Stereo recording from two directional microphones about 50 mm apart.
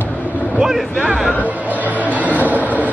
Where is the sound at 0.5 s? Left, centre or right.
Centre.